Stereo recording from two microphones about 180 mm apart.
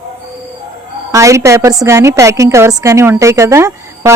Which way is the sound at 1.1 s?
15° right (ahead or behind).